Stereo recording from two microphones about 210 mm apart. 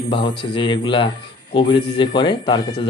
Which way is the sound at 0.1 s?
25° left (ahead or behind).